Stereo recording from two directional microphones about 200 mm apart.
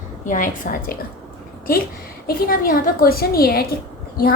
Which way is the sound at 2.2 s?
45° left (ahead or behind).